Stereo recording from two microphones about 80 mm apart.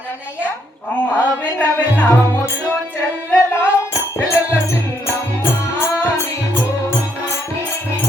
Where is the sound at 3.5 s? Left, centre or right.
Left.